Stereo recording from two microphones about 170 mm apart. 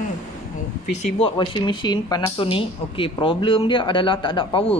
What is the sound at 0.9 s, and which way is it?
Speech, 30° left (ahead or behind).